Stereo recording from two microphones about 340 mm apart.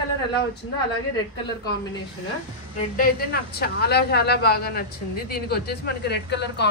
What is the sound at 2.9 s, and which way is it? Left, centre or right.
Speech, left.